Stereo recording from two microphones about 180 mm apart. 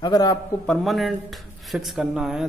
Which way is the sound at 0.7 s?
Centre (ahead or behind).